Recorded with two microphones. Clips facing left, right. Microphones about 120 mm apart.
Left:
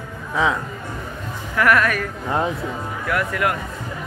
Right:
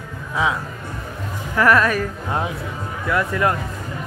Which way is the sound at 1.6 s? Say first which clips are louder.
Right 2 dB; 30° right (ahead or behind).